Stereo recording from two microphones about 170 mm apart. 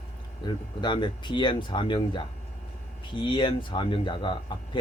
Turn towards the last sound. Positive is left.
turn(degrees=30)  # may be behind; listen again after turning